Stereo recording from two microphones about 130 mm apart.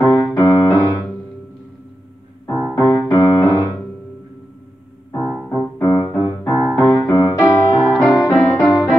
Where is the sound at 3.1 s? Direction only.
30° left (ahead or behind).